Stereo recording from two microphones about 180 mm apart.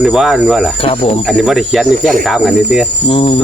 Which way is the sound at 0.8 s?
30° left (ahead or behind).